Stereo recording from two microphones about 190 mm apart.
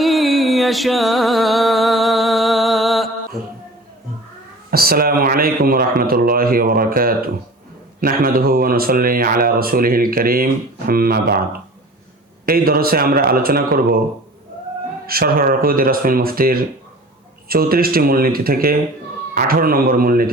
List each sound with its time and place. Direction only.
0.0 s music: centre (ahead or behind)
4.7 s speech: 50° right (ahead or behind)
15.0 s speech: 50° right (ahead or behind)